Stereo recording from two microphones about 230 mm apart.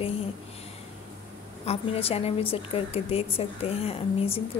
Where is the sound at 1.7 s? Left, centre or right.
Left.